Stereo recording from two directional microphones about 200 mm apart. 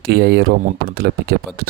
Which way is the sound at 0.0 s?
55° right (ahead or behind).